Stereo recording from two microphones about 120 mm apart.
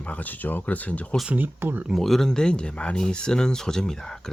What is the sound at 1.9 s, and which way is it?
Speech, centre (ahead or behind).